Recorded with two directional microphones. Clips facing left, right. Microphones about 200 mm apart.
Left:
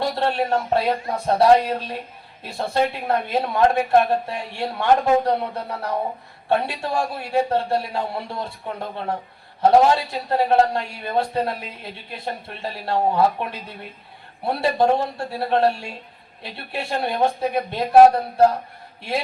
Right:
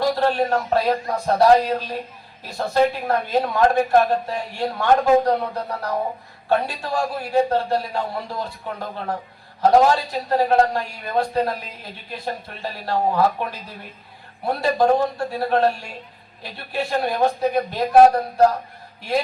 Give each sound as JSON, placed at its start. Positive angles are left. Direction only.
{"t": 0.0, "sound": "a man's voice", "side_deg": 30}